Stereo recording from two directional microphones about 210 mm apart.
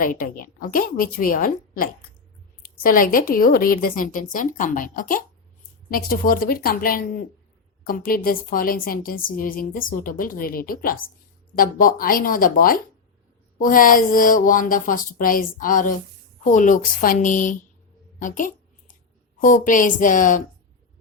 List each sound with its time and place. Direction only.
0.0 s a woman's voice: 40° left (ahead or behind)